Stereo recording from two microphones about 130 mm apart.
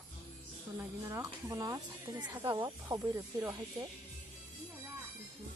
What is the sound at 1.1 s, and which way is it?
Speech, 20° right (ahead or behind).